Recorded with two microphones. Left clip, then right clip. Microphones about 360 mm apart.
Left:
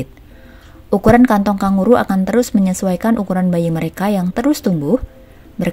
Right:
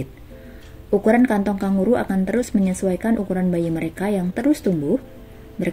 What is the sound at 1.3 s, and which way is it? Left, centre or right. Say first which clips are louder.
Speech: left 7 dB; left.